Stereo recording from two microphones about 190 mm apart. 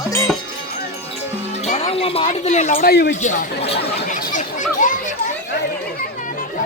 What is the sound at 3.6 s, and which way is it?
Chatter, 35° left (ahead or behind).